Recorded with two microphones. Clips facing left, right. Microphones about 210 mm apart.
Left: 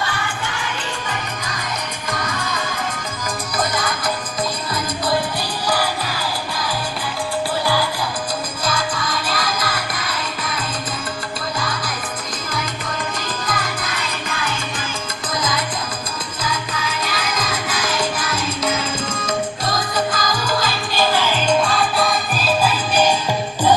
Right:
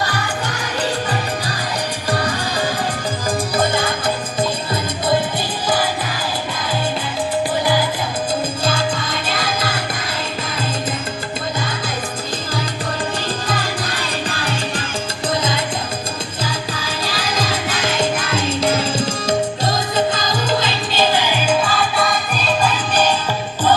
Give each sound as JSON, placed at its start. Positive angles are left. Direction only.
{"t": 2.0, "sound": "music", "side_deg": -35}
{"t": 8.6, "sound": "music", "side_deg": -25}
{"t": 13.2, "sound": "music", "side_deg": -30}